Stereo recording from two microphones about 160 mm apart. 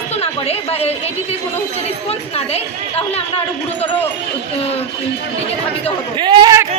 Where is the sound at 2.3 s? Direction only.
40° left (ahead or behind).